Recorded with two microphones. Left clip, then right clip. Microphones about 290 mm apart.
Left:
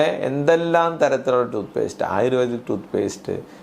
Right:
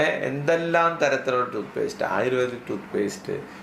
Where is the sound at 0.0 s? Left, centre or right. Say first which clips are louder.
Left 4 dB; left.